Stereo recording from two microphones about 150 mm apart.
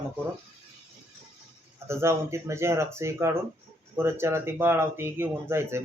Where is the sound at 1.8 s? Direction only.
15° right (ahead or behind).